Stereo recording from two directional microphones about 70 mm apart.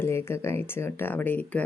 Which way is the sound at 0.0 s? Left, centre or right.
Left.